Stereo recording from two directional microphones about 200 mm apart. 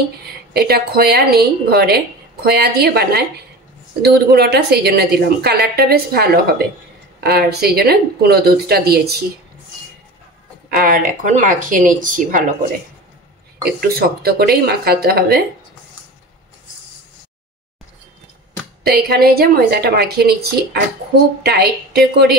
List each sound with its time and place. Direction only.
0.5 s a woman's voice: 50° right (ahead or behind)
10.7 s a woman's voice: 45° right (ahead or behind)
13.6 s a woman's voice: 50° right (ahead or behind)
18.9 s a woman's voice: 50° right (ahead or behind)
21.4 s a woman's voice: 50° right (ahead or behind)